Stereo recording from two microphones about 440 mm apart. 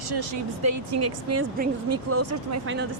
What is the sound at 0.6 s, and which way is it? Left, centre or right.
Speech, right.